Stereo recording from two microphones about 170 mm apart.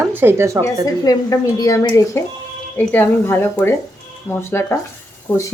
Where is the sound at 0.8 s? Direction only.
20° left (ahead or behind).